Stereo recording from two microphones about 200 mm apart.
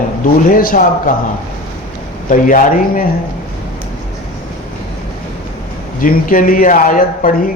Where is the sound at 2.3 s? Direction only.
40° left (ahead or behind).